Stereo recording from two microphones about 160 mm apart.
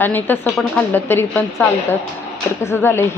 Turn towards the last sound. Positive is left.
turn(degrees=15)  # may be behind; listen again after turning